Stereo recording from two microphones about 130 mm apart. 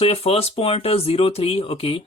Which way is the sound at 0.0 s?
50° left (ahead or behind).